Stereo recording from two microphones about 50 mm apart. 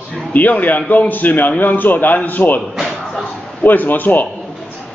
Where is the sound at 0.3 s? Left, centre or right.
Left.